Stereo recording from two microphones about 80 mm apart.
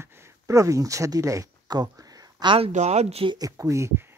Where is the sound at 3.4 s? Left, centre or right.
Right.